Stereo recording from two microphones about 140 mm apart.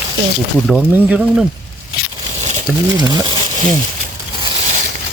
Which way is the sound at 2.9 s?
30° right (ahead or behind).